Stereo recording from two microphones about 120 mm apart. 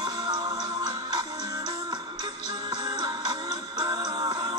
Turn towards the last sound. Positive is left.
turn(degrees=-35)  # may be behind; listen again after turning